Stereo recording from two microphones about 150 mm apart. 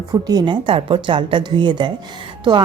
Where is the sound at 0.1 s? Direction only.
25° right (ahead or behind).